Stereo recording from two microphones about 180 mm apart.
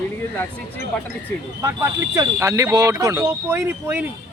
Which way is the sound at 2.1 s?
15° right (ahead or behind).